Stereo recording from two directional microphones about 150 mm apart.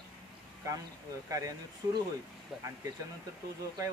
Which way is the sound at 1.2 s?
20° right (ahead or behind).